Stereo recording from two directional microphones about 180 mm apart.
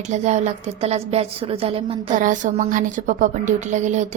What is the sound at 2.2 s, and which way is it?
A woman's voice, 45° right (ahead or behind).